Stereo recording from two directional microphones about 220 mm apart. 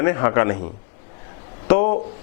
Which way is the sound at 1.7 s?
15° left (ahead or behind).